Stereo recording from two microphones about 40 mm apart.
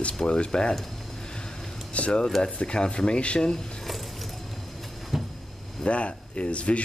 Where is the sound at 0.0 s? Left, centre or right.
Left.